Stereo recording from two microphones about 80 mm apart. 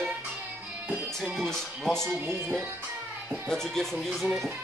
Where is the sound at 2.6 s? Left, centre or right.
Right.